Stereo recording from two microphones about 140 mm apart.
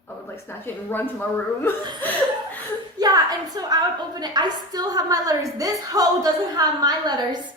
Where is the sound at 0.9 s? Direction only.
15° left (ahead or behind).